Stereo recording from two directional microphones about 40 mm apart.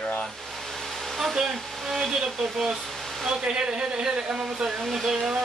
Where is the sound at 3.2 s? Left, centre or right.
Centre.